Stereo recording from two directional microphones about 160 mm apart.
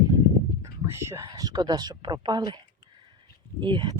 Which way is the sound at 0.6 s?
15° right (ahead or behind).